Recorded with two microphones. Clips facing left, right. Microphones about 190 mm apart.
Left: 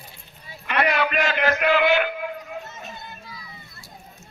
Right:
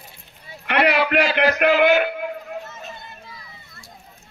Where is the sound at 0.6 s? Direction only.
70° right (ahead or behind).